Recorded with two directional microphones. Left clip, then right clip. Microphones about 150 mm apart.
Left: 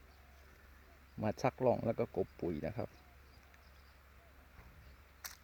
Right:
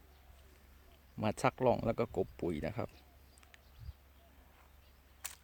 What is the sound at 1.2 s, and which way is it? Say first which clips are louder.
Speech: right 2 dB; 15° right (ahead or behind).